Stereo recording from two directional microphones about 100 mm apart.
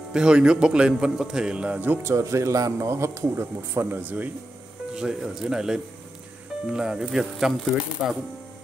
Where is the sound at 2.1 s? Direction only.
30° right (ahead or behind).